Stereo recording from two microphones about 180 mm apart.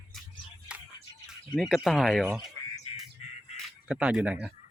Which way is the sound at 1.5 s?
Centre (ahead or behind).